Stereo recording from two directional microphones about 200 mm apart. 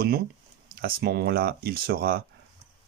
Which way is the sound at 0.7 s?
50° right (ahead or behind).